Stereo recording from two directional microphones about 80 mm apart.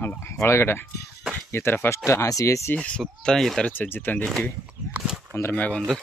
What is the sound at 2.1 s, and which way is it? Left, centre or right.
Speech, left.